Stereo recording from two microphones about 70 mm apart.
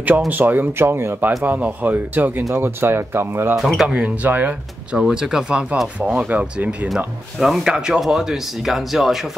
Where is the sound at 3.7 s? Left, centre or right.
Centre.